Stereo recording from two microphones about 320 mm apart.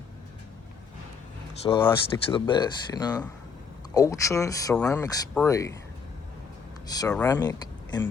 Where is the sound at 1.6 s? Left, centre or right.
Centre.